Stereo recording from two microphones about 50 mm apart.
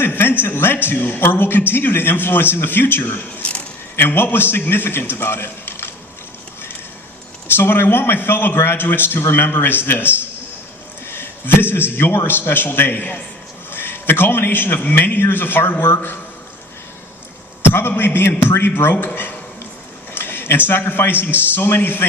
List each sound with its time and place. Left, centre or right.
0.0 s a man's voice: left
7.4 s a man's voice: left
17.7 s a man's voice: left